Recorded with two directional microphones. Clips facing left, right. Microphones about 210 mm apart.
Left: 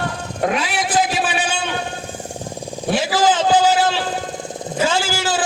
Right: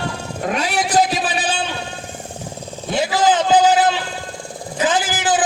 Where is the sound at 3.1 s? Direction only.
20° right (ahead or behind).